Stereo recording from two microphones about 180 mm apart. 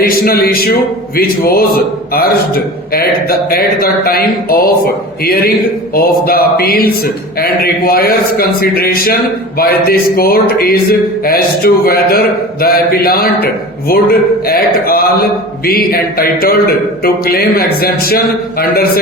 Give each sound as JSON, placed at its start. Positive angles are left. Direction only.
{"t": 0.0, "sound": "a man's voice", "side_deg": 55}
{"t": 5.9, "sound": "a man's voice", "side_deg": 55}